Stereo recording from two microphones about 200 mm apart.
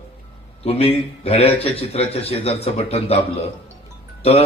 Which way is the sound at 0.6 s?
30° left (ahead or behind).